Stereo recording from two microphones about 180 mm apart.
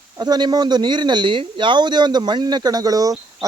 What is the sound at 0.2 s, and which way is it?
Speech, 25° right (ahead or behind).